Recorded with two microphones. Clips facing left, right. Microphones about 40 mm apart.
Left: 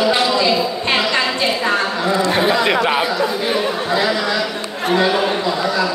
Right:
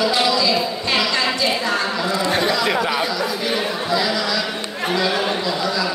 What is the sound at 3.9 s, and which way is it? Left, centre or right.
Speech, left.